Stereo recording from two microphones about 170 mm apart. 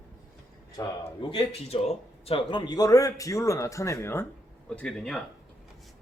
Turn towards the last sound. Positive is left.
turn(degrees=0)  # may be behind; listen again after turning